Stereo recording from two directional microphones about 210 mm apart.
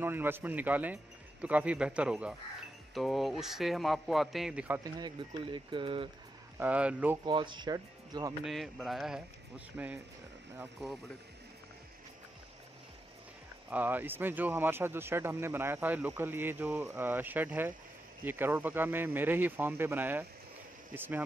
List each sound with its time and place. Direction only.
0.0 s speech: 10° right (ahead or behind)
4.9 s speech: 25° right (ahead or behind)
6.6 s speech: 5° right (ahead or behind)
7.2 s speech: 20° right (ahead or behind)
8.5 s speech: centre (ahead or behind)
13.7 s speech: 10° right (ahead or behind)